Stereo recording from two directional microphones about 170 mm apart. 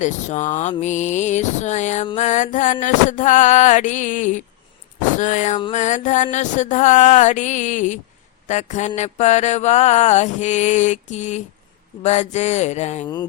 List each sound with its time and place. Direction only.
0.0 s mantra: 45° left (ahead or behind)